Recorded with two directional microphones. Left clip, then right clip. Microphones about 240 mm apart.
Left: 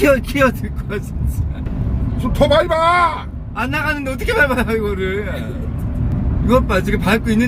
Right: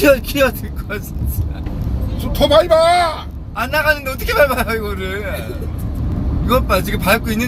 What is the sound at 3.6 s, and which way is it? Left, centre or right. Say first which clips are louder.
Speech: right 4 dB; centre.